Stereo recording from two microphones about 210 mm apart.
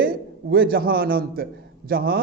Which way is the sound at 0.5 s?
45° right (ahead or behind).